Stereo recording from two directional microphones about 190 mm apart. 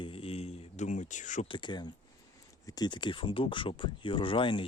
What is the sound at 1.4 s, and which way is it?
Speech, 25° left (ahead or behind).